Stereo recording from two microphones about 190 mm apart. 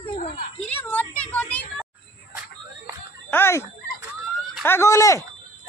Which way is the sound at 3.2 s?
10° left (ahead or behind).